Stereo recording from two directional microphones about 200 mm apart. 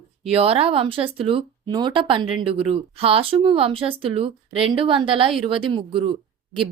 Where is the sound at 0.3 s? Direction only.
30° right (ahead or behind).